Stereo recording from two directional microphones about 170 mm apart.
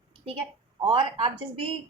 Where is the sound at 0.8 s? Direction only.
35° right (ahead or behind).